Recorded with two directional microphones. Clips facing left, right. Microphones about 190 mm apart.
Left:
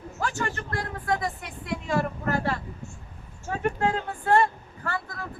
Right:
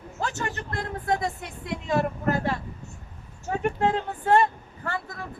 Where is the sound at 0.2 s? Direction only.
20° right (ahead or behind).